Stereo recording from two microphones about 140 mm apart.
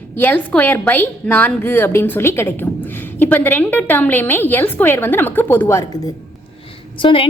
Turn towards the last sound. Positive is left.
turn(degrees=40)  # may be behind; listen again after turning